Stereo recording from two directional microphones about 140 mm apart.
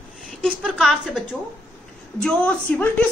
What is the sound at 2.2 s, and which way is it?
Speech, 10° left (ahead or behind).